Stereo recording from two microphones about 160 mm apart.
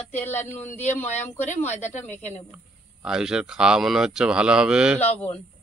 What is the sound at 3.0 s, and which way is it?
Speech, 5° right (ahead or behind).